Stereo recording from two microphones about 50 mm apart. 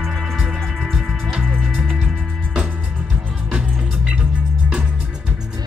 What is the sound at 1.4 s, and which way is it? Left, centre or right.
Music, centre.